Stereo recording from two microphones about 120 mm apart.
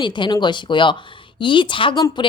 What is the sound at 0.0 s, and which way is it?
A woman's voice, 40° left (ahead or behind).